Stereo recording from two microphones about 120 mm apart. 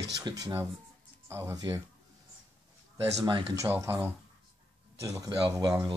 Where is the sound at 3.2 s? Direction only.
45° right (ahead or behind).